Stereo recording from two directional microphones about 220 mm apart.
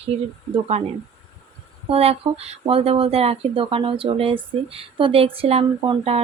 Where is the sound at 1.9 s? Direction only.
25° right (ahead or behind).